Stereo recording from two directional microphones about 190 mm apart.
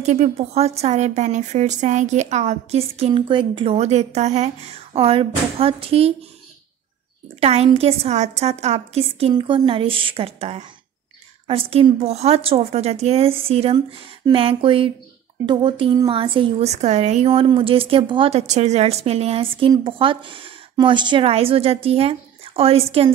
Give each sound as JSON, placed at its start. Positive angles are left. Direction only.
{"t": 0.0, "sound": "speech", "side_deg": -35}
{"t": 7.3, "sound": "a woman's voice", "side_deg": -35}